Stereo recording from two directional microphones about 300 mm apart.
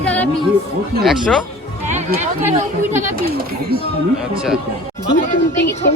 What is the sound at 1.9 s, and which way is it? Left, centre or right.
Music, right.